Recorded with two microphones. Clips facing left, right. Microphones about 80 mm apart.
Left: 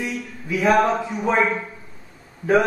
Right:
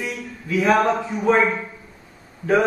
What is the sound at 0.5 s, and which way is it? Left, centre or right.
Speech, centre.